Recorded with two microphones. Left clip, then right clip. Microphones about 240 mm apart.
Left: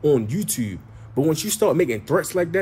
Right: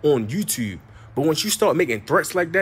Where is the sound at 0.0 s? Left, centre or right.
Centre.